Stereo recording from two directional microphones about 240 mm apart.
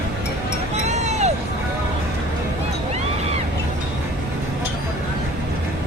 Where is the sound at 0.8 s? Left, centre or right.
Right.